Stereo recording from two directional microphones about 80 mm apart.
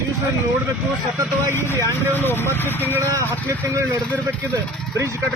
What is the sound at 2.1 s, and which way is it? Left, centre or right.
Speech, left.